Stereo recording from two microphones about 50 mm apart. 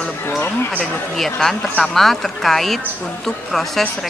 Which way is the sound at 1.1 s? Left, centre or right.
Centre.